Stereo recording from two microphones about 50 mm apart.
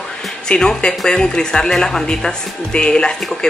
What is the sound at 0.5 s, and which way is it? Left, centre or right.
Speech, centre.